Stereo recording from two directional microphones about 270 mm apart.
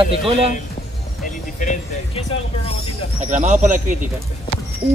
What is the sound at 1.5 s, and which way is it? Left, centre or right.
Speech, left.